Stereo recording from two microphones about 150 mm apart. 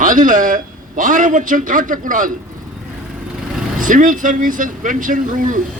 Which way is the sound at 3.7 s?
60° right (ahead or behind).